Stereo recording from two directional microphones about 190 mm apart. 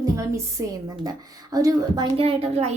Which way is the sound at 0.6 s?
20° right (ahead or behind).